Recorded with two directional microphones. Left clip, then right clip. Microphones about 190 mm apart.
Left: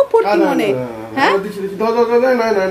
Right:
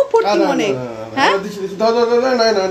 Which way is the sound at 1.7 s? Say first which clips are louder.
Even; 25° right (ahead or behind).